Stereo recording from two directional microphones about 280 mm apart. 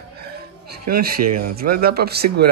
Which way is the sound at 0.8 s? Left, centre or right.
Right.